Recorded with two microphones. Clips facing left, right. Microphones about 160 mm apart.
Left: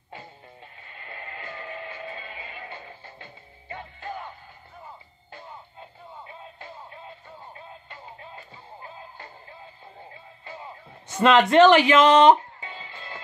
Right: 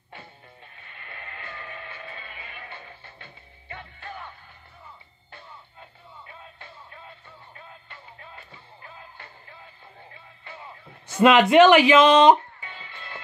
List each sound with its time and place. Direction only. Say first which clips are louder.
0.9 s music: left 3 dB; 25° left (ahead or behind)
5.3 s music: left 4 dB; 25° left (ahead or behind)
11.1 s speech: right 1 dB; 10° right (ahead or behind)
12.5 s music: left 2 dB; 25° left (ahead or behind)